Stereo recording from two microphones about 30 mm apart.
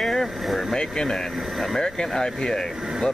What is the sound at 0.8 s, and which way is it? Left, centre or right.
Speech, left.